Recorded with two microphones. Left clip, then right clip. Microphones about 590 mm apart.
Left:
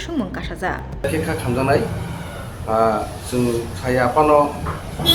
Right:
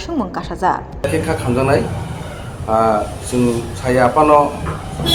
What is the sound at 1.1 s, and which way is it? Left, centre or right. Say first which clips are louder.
A man's voice: right 5 dB; left.